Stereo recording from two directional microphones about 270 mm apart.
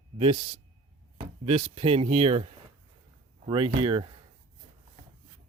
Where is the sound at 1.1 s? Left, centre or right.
Right.